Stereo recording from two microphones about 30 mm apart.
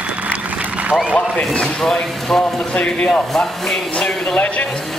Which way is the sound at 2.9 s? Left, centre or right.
Left.